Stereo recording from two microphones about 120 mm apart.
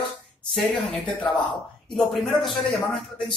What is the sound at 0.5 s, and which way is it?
Speech, centre (ahead or behind).